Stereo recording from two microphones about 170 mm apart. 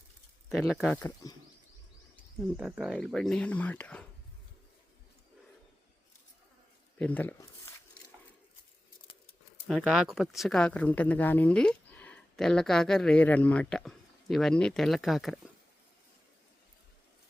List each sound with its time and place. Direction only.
0.4 s speech: centre (ahead or behind)
1.2 s speech: 20° left (ahead or behind)
2.6 s speech: 5° right (ahead or behind)
7.0 s speech: 10° left (ahead or behind)
9.6 s speech: centre (ahead or behind)